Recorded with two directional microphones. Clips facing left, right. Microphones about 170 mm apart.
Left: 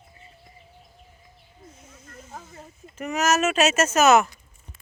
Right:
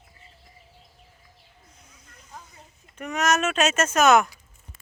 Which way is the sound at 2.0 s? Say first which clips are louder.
Left 4 dB; 45° left (ahead or behind).